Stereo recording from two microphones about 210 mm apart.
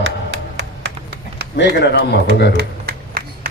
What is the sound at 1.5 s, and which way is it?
Speech, 55° left (ahead or behind).